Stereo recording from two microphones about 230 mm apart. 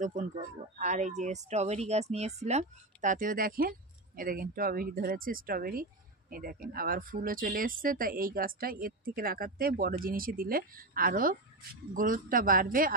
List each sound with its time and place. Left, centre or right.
0.0 s speech: right